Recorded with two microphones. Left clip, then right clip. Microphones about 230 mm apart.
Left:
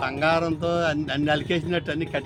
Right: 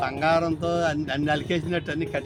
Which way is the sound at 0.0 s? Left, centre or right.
Centre.